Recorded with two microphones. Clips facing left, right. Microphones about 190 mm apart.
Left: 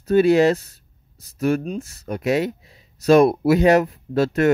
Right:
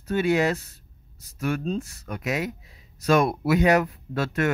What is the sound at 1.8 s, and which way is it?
Speech, 30° left (ahead or behind).